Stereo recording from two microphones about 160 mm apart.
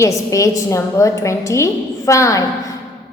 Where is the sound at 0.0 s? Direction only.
20° left (ahead or behind).